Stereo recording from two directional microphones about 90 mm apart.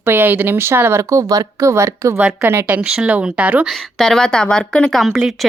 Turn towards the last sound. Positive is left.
turn(degrees=-5)  # may be behind; listen again after turning